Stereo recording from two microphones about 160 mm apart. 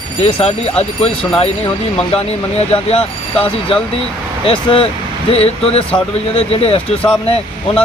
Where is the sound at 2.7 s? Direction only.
40° left (ahead or behind).